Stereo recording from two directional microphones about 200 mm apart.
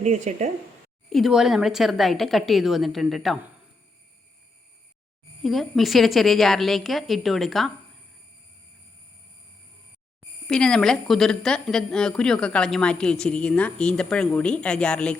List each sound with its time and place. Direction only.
0.0 s speech: 35° right (ahead or behind)
1.1 s a woman's voice: centre (ahead or behind)
5.4 s a woman's voice: centre (ahead or behind)
10.4 s a woman's voice: 5° left (ahead or behind)